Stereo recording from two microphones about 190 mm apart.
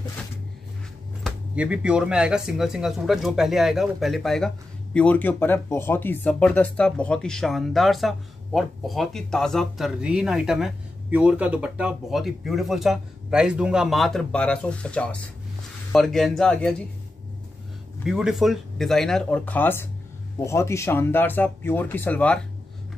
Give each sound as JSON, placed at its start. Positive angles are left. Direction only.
{"t": 1.2, "sound": "speech", "side_deg": -5}
{"t": 18.0, "sound": "speech", "side_deg": 0}